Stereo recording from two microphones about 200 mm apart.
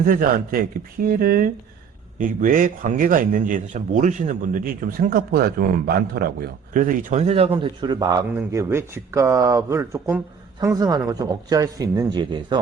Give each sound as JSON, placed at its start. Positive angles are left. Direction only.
{"t": 0.0, "sound": "a man's voice", "side_deg": -45}